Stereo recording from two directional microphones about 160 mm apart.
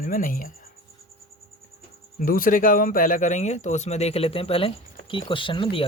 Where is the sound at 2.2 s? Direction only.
60° left (ahead or behind).